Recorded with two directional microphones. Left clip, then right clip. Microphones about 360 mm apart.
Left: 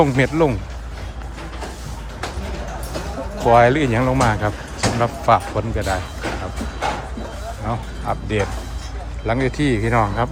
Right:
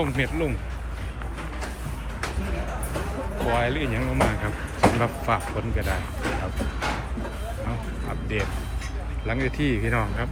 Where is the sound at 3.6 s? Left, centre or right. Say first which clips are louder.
Left 11 dB; left.